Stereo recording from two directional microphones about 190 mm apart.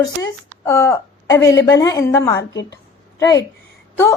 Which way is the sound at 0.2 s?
15° left (ahead or behind).